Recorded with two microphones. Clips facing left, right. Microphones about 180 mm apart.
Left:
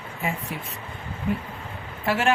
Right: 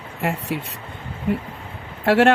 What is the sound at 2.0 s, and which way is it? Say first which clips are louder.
Speech: right 9 dB; 70° right (ahead or behind).